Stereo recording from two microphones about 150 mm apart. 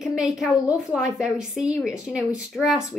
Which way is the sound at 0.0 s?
5° right (ahead or behind).